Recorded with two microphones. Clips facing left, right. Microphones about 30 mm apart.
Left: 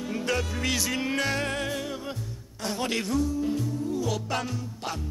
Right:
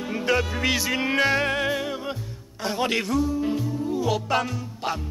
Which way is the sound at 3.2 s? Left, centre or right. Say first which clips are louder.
Right 3 dB; centre.